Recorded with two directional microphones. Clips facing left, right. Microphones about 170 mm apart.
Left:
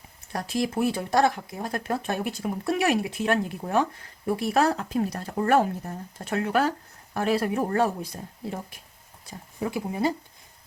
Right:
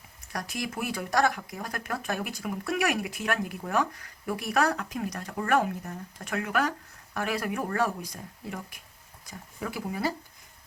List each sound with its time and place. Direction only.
0.3 s speech: 25° left (ahead or behind)